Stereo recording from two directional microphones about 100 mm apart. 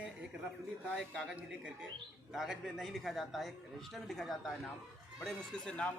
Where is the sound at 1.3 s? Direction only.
10° right (ahead or behind); by 5.9 s 10° left (ahead or behind).